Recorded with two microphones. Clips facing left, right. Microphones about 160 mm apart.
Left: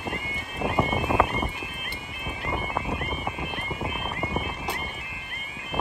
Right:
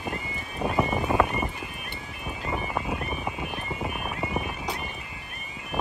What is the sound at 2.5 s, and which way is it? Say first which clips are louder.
Music: even; 15° left (ahead or behind).